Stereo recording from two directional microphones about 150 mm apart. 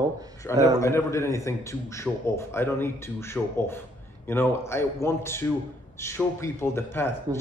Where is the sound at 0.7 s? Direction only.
20° left (ahead or behind).